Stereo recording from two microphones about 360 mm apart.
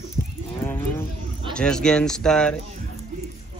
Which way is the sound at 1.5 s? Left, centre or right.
Centre.